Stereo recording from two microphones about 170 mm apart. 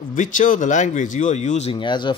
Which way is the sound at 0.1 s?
50° left (ahead or behind).